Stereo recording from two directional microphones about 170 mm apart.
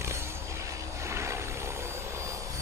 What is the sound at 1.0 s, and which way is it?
Vehicle, 15° right (ahead or behind).